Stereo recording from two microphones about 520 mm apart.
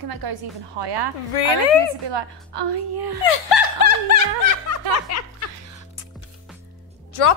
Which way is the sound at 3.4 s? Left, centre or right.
Left.